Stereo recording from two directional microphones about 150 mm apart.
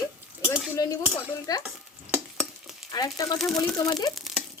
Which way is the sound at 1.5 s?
25° left (ahead or behind).